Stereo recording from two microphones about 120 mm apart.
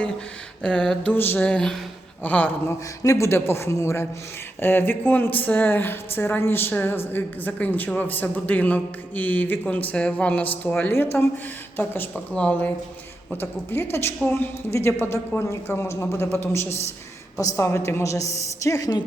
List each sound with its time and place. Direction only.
0.6 s speech: 5° left (ahead or behind)
3.0 s a woman's voice: 25° left (ahead or behind)